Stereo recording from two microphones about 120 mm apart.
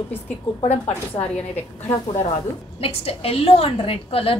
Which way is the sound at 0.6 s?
55° left (ahead or behind).